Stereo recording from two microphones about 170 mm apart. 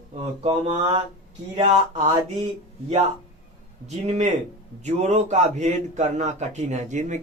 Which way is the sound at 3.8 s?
40° right (ahead or behind).